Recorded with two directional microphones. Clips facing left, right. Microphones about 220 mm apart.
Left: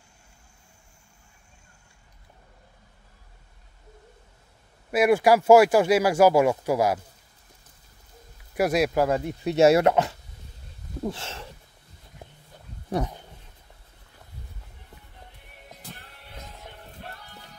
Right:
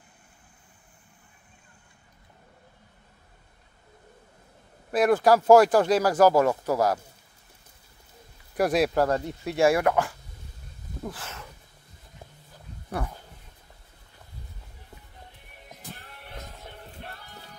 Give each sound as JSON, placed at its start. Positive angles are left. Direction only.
{"t": 4.9, "sound": "speech", "side_deg": 10}
{"t": 8.5, "sound": "speech", "side_deg": 0}
{"t": 11.1, "sound": "a sound", "side_deg": 25}
{"t": 12.9, "sound": "speech", "side_deg": 20}